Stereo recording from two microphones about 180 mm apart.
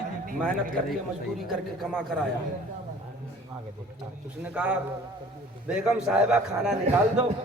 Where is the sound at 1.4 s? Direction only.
Centre (ahead or behind).